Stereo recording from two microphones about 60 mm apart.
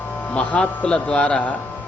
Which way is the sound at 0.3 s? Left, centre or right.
Left.